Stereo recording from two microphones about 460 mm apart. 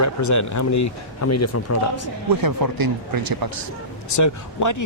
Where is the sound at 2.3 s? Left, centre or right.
Right.